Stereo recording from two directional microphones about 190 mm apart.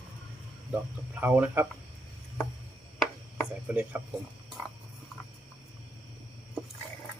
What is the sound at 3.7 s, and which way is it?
Speech, 10° right (ahead or behind).